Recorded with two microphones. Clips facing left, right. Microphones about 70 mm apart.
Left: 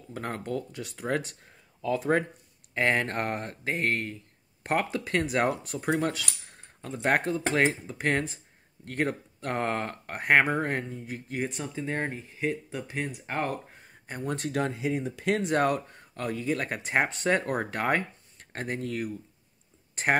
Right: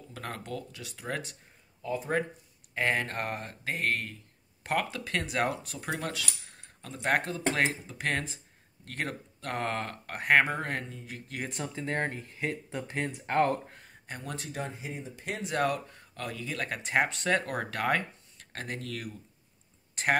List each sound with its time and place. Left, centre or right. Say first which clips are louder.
0.1 s speech: left 6 dB; left
2.7 s speech: left 3 dB; left
11.4 s speech: even; centre
14.0 s speech: left 7 dB; left
14.3 s speech: left 11 dB; left
14.6 s speech: left 10 dB; left
15.4 s speech: even; left